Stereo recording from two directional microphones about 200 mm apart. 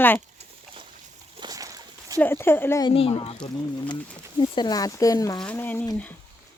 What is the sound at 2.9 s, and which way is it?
Speech, 30° left (ahead or behind).